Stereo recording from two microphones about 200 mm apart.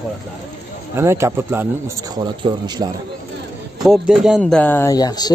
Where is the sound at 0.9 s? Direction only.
15° right (ahead or behind).